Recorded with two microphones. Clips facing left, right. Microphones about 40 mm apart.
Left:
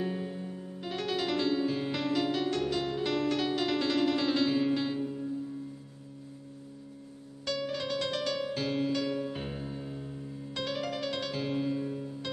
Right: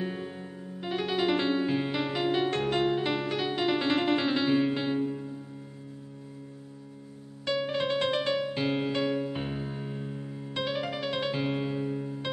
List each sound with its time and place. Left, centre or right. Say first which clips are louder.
0.0 s music: even; centre
7.4 s music: right 5 dB; right